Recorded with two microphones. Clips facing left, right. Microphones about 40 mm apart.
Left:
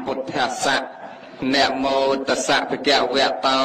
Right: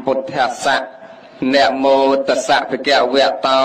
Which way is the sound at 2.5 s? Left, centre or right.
Right.